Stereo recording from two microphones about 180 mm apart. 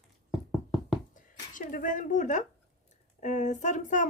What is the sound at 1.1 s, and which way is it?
Zipper, 50° left (ahead or behind).